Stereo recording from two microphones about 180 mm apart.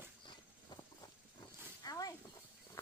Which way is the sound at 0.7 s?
25° left (ahead or behind).